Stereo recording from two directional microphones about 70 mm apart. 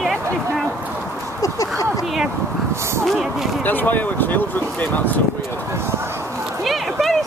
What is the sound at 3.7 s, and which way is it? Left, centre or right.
Speech, left.